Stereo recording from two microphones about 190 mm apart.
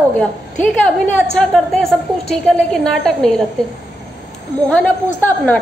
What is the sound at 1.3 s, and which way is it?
A woman's voice, 5° left (ahead or behind).